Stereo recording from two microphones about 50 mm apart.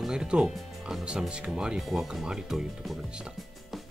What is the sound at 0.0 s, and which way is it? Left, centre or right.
Speech, centre.